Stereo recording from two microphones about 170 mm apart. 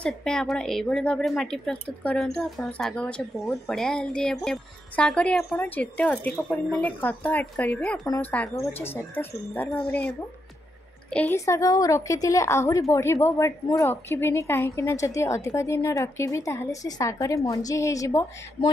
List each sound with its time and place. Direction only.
0.0 s a woman's voice: 5° left (ahead or behind)
11.3 s a woman's voice: 20° left (ahead or behind)
18.6 s speech: 35° left (ahead or behind)